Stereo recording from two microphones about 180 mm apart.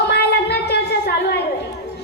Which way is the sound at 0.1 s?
65° left (ahead or behind).